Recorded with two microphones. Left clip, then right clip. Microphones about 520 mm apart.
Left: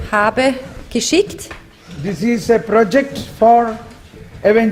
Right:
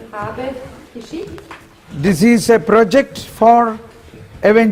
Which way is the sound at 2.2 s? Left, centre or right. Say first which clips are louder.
Right 3 dB; right.